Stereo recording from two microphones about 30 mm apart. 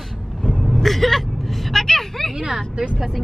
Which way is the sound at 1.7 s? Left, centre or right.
Centre.